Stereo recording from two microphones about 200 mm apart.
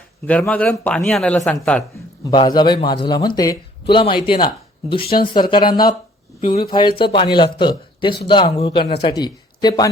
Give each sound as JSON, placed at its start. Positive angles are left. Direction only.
{"t": 0.3, "sound": "speech", "side_deg": 5}
{"t": 2.3, "sound": "speech", "side_deg": 20}